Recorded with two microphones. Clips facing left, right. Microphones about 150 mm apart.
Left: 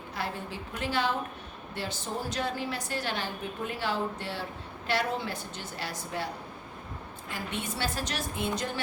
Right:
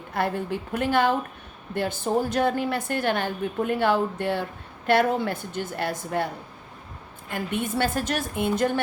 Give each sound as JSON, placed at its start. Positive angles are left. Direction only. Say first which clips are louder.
{"t": 0.1, "sound": "a woman's voice", "louder": "right 10 dB", "side_deg": -55}
{"t": 7.3, "sound": "a woman's voice", "louder": "right 8 dB", "side_deg": -55}